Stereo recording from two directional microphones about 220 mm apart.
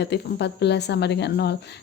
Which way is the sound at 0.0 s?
50° left (ahead or behind).